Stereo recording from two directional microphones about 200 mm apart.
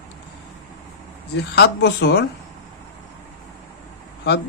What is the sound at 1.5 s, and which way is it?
Speech, 55° left (ahead or behind).